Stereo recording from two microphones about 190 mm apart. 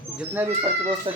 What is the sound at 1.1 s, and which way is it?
Speech, 25° right (ahead or behind).